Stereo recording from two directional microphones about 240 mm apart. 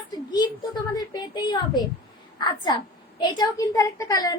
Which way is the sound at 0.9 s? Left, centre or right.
Centre.